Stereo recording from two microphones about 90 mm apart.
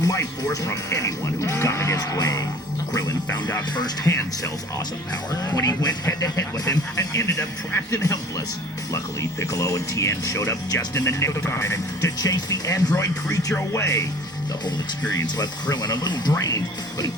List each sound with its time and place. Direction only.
0.0 s speech: 40° left (ahead or behind)
3.8 s speech: 50° left (ahead or behind)
5.3 s speech: 40° left (ahead or behind)
9.4 s speech: 35° left (ahead or behind)
15.7 s speech: 50° left (ahead or behind)